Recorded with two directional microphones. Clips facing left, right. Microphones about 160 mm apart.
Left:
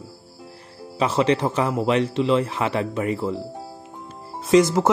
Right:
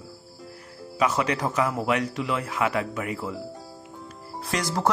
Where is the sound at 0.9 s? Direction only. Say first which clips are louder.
Left 4 dB; 30° left (ahead or behind).